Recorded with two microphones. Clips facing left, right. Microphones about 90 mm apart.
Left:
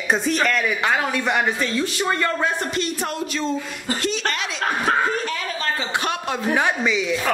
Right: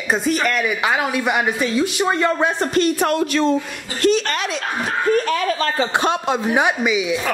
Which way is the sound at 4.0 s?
50° right (ahead or behind).